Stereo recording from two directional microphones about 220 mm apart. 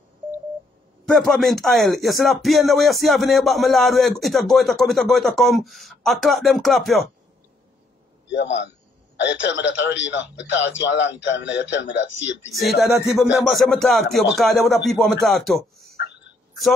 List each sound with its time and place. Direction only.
1.0 s speech: centre (ahead or behind)
9.2 s speech: 55° left (ahead or behind)
12.5 s speech: centre (ahead or behind)